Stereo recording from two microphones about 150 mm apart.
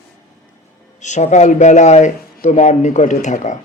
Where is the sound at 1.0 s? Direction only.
50° left (ahead or behind).